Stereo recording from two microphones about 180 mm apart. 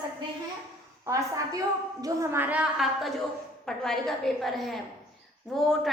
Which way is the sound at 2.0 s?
20° right (ahead or behind).